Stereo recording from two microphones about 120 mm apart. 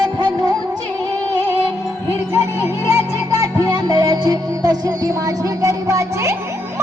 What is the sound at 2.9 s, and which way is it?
Music, 25° right (ahead or behind).